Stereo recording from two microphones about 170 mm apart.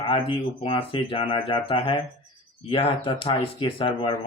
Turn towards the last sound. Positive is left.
turn(degrees=30)  # may be behind; listen again after turning